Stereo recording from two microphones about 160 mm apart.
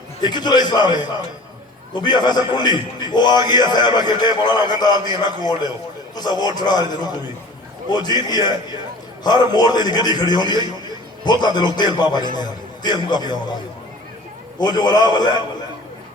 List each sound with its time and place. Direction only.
0.2 s a man's voice: 25° left (ahead or behind)
14.6 s a man's voice: 25° left (ahead or behind)